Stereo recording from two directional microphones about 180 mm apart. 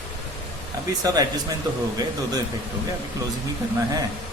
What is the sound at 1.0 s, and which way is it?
Speech, 20° right (ahead or behind).